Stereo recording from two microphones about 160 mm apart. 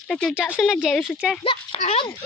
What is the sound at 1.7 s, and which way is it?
Speech, 45° left (ahead or behind).